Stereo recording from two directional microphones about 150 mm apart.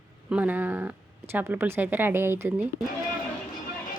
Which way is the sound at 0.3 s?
10° right (ahead or behind).